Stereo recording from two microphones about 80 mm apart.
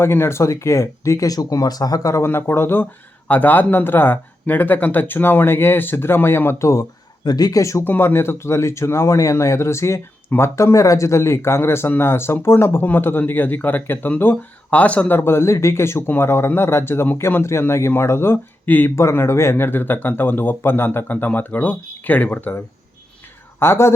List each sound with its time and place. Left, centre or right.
0.0 s speech: left
2.2 s speech: left
7.3 s speech: left
7.9 s speech: left